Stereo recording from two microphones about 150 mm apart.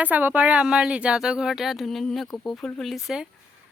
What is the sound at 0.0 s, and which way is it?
A woman's voice, 10° right (ahead or behind).